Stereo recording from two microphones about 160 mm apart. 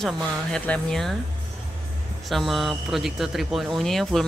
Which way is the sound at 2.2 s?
Centre (ahead or behind).